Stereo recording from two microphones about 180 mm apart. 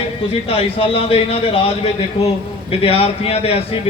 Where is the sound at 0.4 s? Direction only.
35° left (ahead or behind).